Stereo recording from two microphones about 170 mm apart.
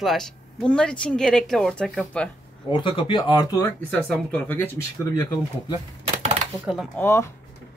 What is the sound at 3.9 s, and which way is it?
Speech, 10° left (ahead or behind).